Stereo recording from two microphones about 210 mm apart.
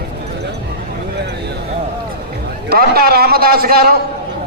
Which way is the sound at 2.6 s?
45° right (ahead or behind).